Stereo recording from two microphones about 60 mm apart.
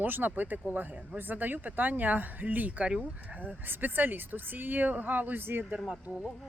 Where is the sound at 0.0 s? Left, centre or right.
Right.